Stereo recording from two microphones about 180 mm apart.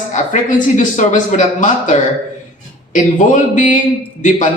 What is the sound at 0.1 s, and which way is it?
Speech, 45° left (ahead or behind).